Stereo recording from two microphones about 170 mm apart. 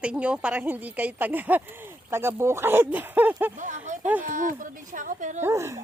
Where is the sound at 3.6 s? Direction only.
45° right (ahead or behind).